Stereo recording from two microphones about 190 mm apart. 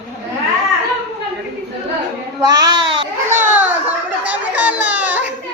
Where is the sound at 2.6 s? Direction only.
25° right (ahead or behind).